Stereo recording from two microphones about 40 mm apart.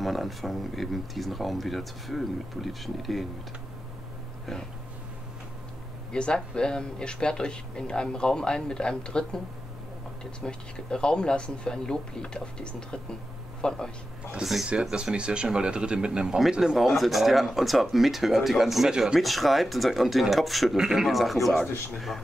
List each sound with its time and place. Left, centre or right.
0.0 s speech: centre
6.1 s speech: left
10.4 s speech: left
14.4 s speech: centre
15.1 s speech: right
16.7 s speech: centre
18.9 s speech: right
19.1 s speech: centre
20.7 s speech: centre
21.1 s speech: centre